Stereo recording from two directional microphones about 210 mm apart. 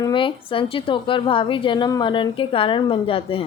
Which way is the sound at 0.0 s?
25° left (ahead or behind).